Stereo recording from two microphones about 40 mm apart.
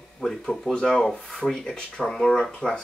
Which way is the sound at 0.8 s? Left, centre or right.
Centre.